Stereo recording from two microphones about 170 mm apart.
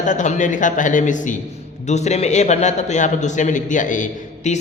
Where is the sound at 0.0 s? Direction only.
45° left (ahead or behind).